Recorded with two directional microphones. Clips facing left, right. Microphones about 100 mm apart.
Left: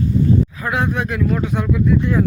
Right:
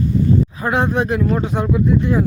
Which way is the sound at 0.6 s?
30° right (ahead or behind).